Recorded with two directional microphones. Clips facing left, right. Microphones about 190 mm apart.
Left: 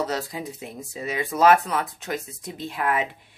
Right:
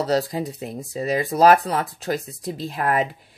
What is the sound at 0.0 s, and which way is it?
Speech, 35° right (ahead or behind).